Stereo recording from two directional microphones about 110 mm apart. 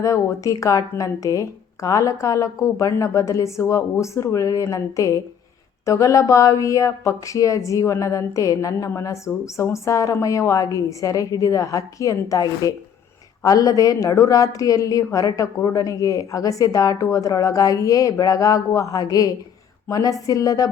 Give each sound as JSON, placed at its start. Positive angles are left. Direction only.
{"t": 0.0, "sound": "a woman's voice", "side_deg": 30}